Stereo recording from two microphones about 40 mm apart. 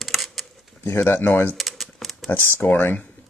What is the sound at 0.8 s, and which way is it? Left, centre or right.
Speech, left.